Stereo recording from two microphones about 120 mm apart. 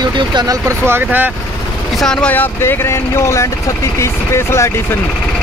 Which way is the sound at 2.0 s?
5° left (ahead or behind).